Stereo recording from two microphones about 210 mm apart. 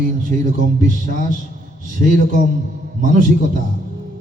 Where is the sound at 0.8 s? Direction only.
40° right (ahead or behind).